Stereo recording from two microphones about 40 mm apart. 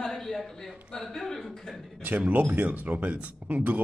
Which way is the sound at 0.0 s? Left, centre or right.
Centre.